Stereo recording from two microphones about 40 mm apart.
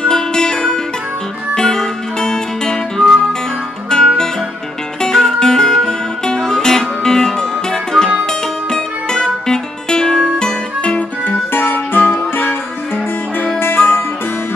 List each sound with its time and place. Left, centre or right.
0.0 s music: centre
10.8 s guitar: left
11.5 s music: left
13.6 s music: left